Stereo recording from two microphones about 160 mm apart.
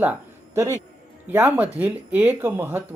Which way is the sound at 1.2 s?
10° right (ahead or behind).